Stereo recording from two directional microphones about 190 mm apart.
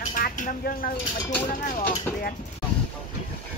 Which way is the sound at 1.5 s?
45° left (ahead or behind).